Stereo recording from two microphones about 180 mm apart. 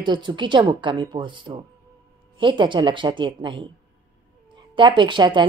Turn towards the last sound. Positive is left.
turn(degrees=-25)  # may be behind; listen again after turning